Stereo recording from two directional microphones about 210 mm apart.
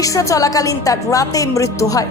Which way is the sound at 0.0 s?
15° left (ahead or behind).